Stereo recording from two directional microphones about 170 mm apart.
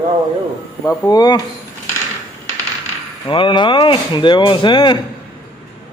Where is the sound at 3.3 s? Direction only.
30° left (ahead or behind).